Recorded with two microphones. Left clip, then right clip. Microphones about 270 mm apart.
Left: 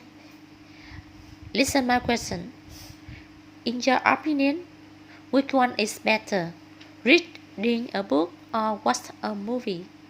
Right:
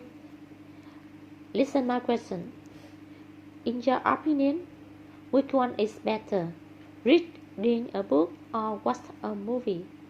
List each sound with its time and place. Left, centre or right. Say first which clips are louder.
1.5 s a woman's voice: left 4 dB; left
3.6 s a woman's voice: left 4 dB; left